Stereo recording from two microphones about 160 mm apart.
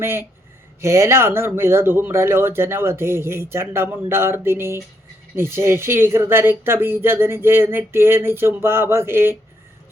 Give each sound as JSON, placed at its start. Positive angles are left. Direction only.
{"t": 0.0, "sound": "speech", "side_deg": -15}